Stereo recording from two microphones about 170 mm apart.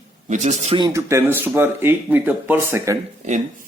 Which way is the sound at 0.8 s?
20° right (ahead or behind).